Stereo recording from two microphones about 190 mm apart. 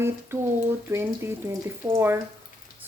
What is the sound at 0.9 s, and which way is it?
A woman's voice, 15° right (ahead or behind).